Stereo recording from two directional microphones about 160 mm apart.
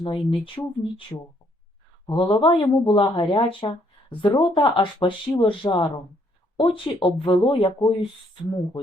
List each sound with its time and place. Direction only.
0.0 s speech: 35° left (ahead or behind)
2.0 s speech: 30° left (ahead or behind)